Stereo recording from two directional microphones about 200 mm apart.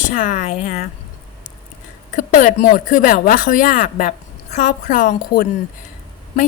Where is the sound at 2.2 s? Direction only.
40° left (ahead or behind).